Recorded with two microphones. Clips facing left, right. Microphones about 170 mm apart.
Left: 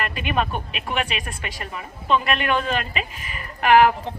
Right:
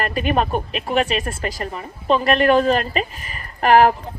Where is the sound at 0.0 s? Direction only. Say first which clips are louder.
Right 5 dB; 40° right (ahead or behind).